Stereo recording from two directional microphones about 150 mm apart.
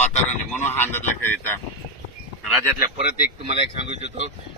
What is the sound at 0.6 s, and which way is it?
Speech, 15° left (ahead or behind).